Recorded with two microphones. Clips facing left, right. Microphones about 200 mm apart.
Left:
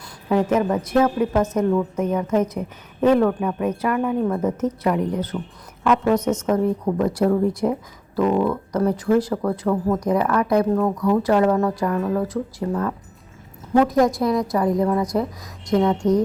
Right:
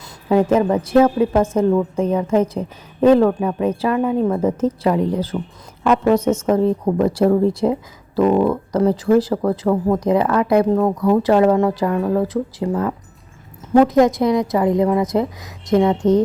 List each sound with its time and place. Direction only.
0.0 s a woman's voice: 30° right (ahead or behind)